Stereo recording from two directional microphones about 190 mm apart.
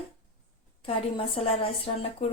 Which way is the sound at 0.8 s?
30° left (ahead or behind).